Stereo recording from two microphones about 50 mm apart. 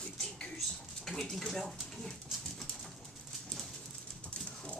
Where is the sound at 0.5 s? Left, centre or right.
Centre.